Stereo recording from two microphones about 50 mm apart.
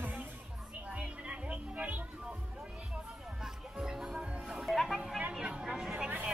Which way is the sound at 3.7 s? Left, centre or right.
Centre.